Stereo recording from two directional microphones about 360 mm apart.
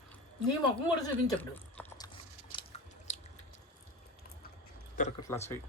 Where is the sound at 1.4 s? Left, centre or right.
Centre.